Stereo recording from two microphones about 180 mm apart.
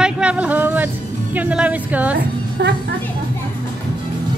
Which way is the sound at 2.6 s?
70° right (ahead or behind).